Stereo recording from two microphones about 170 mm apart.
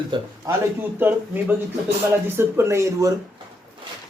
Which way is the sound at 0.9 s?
10° right (ahead or behind).